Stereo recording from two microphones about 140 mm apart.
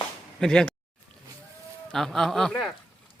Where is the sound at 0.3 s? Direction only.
5° left (ahead or behind).